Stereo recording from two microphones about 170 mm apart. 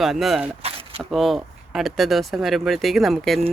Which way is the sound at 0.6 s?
35° right (ahead or behind).